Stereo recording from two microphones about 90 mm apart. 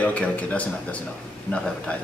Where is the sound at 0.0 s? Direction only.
15° left (ahead or behind).